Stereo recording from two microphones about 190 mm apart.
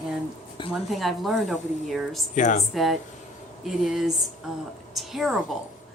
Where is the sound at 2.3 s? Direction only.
40° left (ahead or behind).